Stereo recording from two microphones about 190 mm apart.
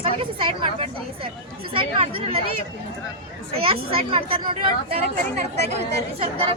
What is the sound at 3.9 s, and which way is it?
Speech, 30° right (ahead or behind).